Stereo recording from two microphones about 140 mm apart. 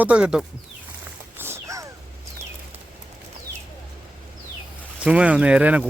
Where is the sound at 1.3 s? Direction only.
15° right (ahead or behind).